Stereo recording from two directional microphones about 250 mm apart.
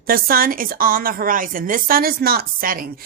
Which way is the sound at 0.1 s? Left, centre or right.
Right.